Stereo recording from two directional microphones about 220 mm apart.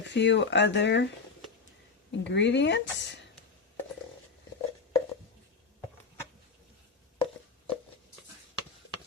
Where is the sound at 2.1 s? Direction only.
55° left (ahead or behind).